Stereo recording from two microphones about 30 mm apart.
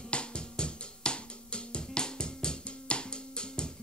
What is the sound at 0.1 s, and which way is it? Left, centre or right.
Music, left.